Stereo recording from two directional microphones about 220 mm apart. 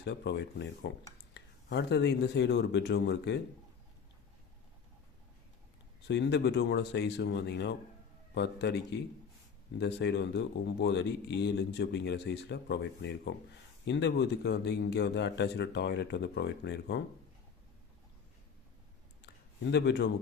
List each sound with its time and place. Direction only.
0.0 s speech: 50° left (ahead or behind)
6.1 s speech: 50° left (ahead or behind)
19.7 s speech: 50° left (ahead or behind)